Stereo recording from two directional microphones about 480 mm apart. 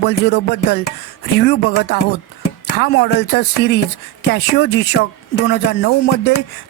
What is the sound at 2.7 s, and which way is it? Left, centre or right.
Speech, left.